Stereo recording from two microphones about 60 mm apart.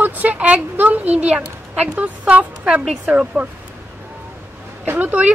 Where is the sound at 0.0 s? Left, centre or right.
Right.